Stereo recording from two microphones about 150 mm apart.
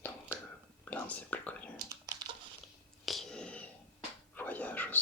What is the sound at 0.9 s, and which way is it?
Whispering, 10° left (ahead or behind).